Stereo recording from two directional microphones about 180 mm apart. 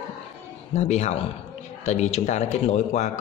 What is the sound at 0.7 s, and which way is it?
A man's voice, 40° left (ahead or behind).